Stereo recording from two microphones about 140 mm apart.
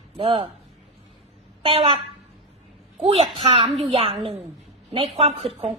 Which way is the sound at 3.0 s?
45° right (ahead or behind).